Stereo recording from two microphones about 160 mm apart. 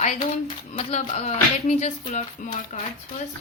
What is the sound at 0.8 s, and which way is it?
Speech, 40° left (ahead or behind).